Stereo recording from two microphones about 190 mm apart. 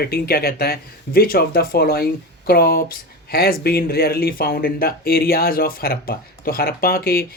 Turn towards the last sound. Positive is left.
turn(degrees=50)  # may be behind; listen again after turning